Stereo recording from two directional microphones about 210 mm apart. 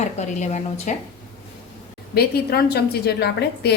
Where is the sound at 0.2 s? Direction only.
35° left (ahead or behind).